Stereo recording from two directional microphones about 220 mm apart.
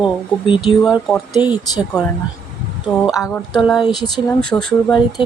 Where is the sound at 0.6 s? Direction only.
Centre (ahead or behind).